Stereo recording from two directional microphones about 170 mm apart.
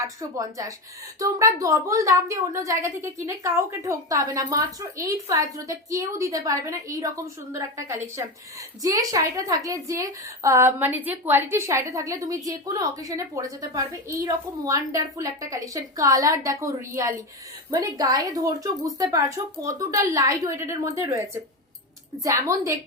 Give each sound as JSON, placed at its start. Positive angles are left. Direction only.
{"t": 0.0, "sound": "a woman's voice", "side_deg": -20}